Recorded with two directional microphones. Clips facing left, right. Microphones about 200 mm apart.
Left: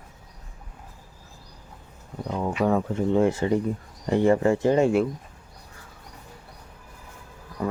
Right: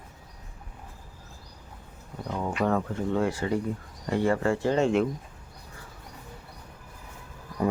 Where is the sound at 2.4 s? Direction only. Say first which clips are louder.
Left 3 dB; 5° left (ahead or behind).